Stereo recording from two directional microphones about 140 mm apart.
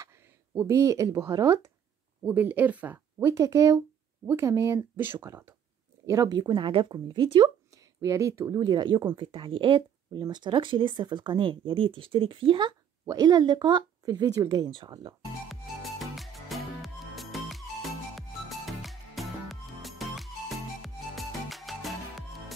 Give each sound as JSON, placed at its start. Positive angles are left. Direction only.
{"t": 0.6, "sound": "speech", "side_deg": -20}
{"t": 2.2, "sound": "speech", "side_deg": -10}
{"t": 3.3, "sound": "speech", "side_deg": -25}
{"t": 8.0, "sound": "speech", "side_deg": -20}
{"t": 8.5, "sound": "speech", "side_deg": -30}
{"t": 15.4, "sound": "music", "side_deg": 0}